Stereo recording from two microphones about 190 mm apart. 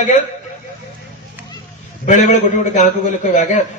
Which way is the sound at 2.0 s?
40° left (ahead or behind).